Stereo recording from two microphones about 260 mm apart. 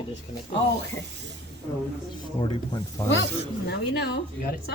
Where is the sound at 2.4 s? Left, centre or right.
Centre.